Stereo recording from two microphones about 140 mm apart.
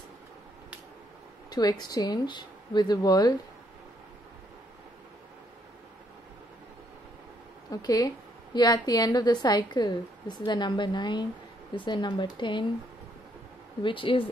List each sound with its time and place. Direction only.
1.5 s a woman's voice: 30° left (ahead or behind)
7.7 s a woman's voice: 25° left (ahead or behind)
13.8 s speech: 40° left (ahead or behind)